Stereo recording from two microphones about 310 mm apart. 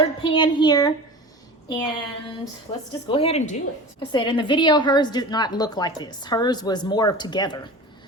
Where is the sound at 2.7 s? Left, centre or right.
Centre.